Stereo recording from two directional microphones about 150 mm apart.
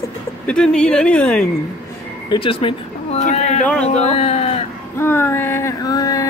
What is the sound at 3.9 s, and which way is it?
Speech, 45° left (ahead or behind).